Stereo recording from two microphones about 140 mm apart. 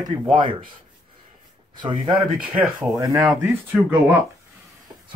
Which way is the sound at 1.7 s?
35° right (ahead or behind).